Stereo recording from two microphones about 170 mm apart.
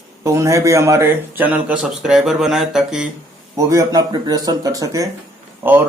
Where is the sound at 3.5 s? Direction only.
20° right (ahead or behind).